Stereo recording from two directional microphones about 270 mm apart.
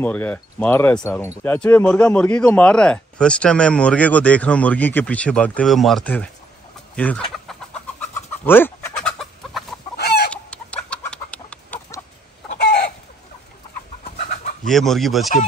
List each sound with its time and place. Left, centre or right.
0.0 s speech: centre
8.0 s chicken: centre
9.9 s chicken: left
10.3 s chicken: centre
14.1 s chicken: left
14.7 s speech: centre